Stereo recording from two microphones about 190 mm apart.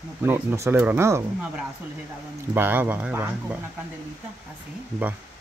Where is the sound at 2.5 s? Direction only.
10° right (ahead or behind).